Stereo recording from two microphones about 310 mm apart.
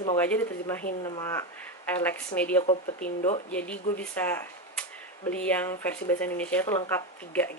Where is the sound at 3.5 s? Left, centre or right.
Centre.